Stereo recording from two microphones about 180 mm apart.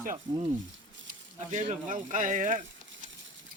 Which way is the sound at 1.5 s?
45° right (ahead or behind).